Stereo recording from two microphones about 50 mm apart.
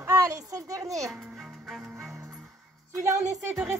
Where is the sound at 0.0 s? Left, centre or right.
Right.